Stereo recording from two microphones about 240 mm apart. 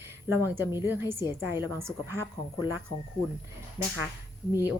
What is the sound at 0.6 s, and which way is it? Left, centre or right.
A woman's voice, centre.